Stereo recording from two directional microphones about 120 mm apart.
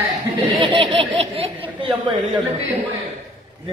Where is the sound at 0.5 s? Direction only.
45° right (ahead or behind).